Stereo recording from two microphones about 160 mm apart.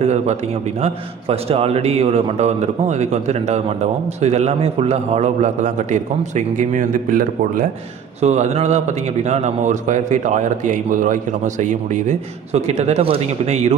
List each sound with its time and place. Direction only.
0.0 s a man's voice: 45° right (ahead or behind); by 7.6 s 60° right (ahead or behind)
8.2 s a man's voice: 45° right (ahead or behind)